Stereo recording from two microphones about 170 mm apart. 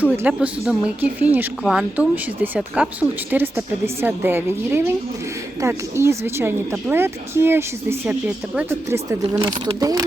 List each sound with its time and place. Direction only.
0.0 s a woman's voice: 10° right (ahead or behind)
9.4 s speech: 25° right (ahead or behind)